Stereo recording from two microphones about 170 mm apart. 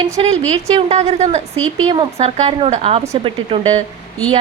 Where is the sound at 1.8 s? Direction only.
30° right (ahead or behind).